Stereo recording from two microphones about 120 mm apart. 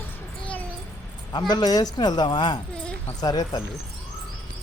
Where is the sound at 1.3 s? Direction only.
35° left (ahead or behind).